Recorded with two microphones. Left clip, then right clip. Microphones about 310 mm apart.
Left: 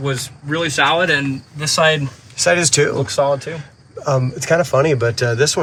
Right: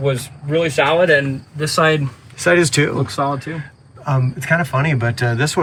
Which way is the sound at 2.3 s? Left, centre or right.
Centre.